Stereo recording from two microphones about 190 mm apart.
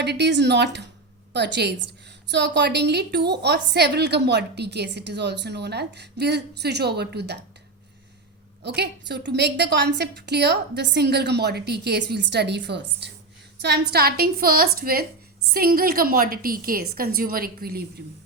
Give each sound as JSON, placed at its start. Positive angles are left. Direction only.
{"t": 0.0, "sound": "a woman's voice", "side_deg": -60}
{"t": 8.6, "sound": "a woman's voice", "side_deg": -60}